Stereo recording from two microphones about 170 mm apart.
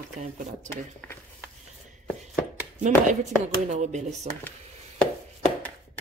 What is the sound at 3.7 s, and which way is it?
Speech, 45° right (ahead or behind).